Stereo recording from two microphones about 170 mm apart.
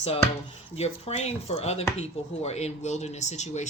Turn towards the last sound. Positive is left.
turn(degrees=45)  # may be behind; listen again after turning